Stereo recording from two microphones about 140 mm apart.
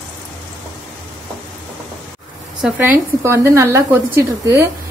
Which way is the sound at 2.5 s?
15° right (ahead or behind).